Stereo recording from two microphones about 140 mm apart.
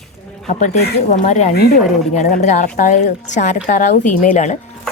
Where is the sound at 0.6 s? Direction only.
60° left (ahead or behind).